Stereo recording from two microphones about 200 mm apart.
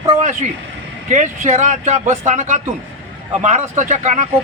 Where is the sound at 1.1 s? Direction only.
40° right (ahead or behind).